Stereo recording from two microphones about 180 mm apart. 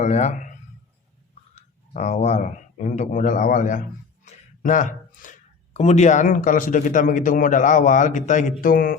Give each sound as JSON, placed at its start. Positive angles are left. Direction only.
{"t": 0.0, "sound": "speech", "side_deg": 40}
{"t": 1.5, "sound": "speech", "side_deg": 40}